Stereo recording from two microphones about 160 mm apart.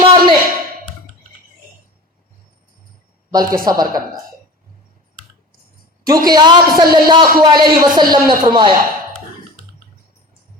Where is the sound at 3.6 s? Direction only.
25° right (ahead or behind).